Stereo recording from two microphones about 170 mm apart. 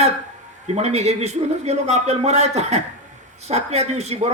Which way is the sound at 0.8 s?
40° right (ahead or behind).